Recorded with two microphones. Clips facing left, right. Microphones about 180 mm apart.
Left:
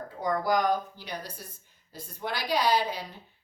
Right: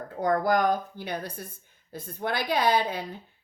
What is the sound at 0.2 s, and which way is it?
A woman's voice, 55° right (ahead or behind).